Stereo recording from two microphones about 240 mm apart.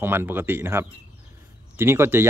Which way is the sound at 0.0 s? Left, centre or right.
Centre.